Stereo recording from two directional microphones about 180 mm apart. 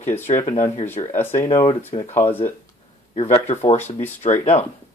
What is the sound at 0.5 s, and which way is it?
Speech, 35° left (ahead or behind).